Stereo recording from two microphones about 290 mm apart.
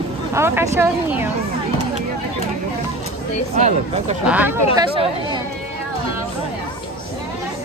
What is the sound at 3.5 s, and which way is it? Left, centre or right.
Speech, right.